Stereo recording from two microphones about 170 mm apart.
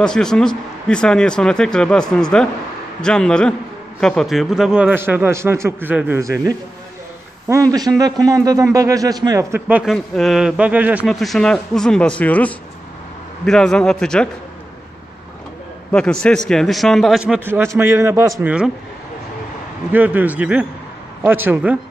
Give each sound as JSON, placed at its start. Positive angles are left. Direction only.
{"t": 0.0, "sound": "a man's voice", "side_deg": 5}
{"t": 7.5, "sound": "a man's voice", "side_deg": -15}
{"t": 9.9, "sound": "speech", "side_deg": 0}
{"t": 15.9, "sound": "a man's voice", "side_deg": 5}
{"t": 19.9, "sound": "a man's voice", "side_deg": -10}